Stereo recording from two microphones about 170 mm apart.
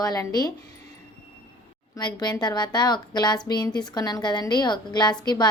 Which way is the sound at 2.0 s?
25° left (ahead or behind).